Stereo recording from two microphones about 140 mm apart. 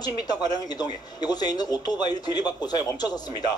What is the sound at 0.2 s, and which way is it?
Speech, 30° left (ahead or behind).